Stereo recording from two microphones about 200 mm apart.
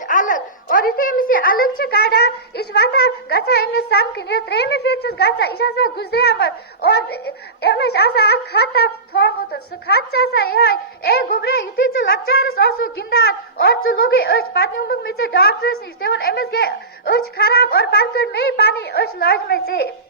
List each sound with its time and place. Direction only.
0.1 s a woman's voice: 40° left (ahead or behind)